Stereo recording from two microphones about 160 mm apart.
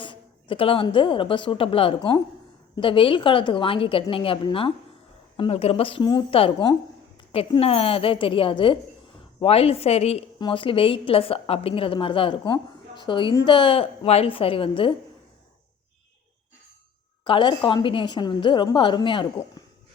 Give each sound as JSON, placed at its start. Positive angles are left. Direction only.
{"t": 0.0, "sound": "a woman's voice", "side_deg": 30}
{"t": 17.2, "sound": "a woman's voice", "side_deg": 30}